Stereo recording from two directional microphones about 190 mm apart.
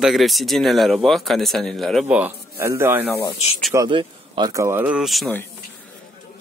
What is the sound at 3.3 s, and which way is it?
Speech, 35° left (ahead or behind).